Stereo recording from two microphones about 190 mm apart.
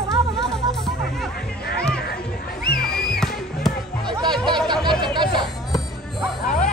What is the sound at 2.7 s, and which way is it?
Music, 50° left (ahead or behind).